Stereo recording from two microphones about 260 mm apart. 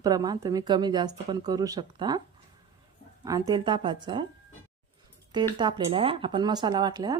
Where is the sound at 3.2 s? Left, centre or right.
Centre.